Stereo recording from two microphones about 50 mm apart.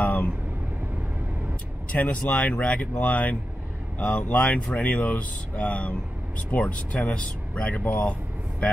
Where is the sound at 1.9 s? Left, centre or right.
Left.